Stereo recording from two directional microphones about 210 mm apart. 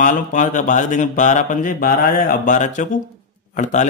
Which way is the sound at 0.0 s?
40° left (ahead or behind).